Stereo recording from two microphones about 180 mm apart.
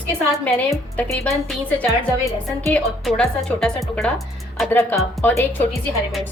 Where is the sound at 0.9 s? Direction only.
5° left (ahead or behind).